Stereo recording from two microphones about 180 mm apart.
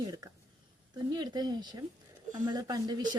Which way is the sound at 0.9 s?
25° right (ahead or behind).